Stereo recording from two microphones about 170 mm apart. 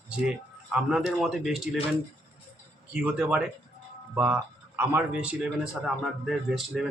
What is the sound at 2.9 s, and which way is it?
Speech, 5° right (ahead or behind).